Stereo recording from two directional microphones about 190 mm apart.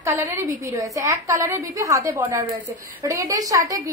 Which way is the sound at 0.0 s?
15° right (ahead or behind).